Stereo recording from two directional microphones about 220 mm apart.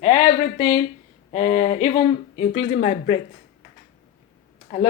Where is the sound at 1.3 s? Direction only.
25° left (ahead or behind).